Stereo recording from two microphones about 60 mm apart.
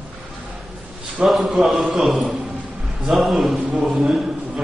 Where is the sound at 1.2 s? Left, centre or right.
Centre.